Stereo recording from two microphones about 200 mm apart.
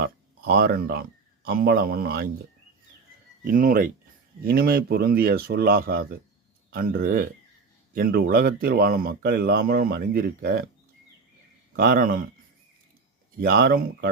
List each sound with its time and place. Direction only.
0.6 s speech: 50° right (ahead or behind)
3.4 s speech: 45° right (ahead or behind)
11.8 s speech: 45° right (ahead or behind)
13.3 s speech: 45° right (ahead or behind)